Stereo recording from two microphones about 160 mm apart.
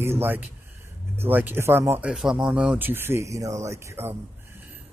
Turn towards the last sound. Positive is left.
turn(degrees=-15)  # may be behind; listen again after turning